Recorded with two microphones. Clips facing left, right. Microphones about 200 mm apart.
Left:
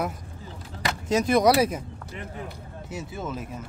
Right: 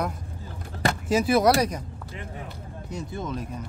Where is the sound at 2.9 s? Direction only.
5° left (ahead or behind).